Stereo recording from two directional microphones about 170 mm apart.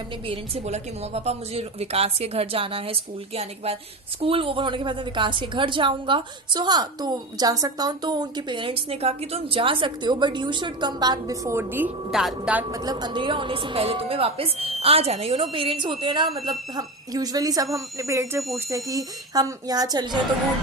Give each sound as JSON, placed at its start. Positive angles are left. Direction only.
{"t": 0.3, "sound": "a woman's voice", "side_deg": -40}
{"t": 12.7, "sound": "a woman's voice", "side_deg": -25}